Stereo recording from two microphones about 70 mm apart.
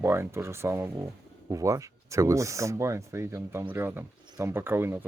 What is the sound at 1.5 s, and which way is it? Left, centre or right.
Speech, right.